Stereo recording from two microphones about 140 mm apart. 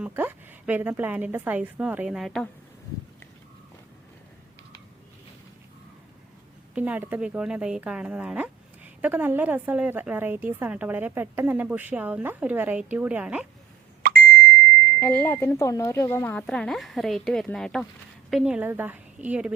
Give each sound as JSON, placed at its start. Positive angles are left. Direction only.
{"t": 0.0, "sound": "speech", "side_deg": -15}
{"t": 6.7, "sound": "speech", "side_deg": -10}
{"t": 14.0, "sound": "plop", "side_deg": -90}
{"t": 15.0, "sound": "speech", "side_deg": 15}